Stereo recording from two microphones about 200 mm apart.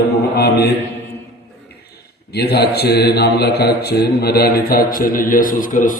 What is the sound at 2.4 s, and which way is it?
A man's voice, 55° left (ahead or behind).